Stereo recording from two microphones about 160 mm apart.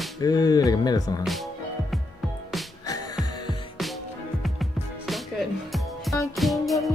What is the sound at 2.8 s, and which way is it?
Music, 20° left (ahead or behind).